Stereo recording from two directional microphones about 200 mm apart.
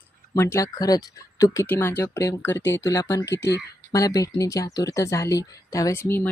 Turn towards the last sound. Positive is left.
turn(degrees=10)  # may be behind; listen again after turning